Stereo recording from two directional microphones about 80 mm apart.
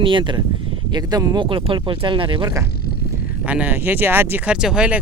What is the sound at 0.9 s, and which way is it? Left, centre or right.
Speech, right.